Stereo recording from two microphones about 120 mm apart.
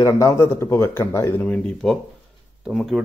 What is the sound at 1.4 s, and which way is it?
Speech, 10° left (ahead or behind).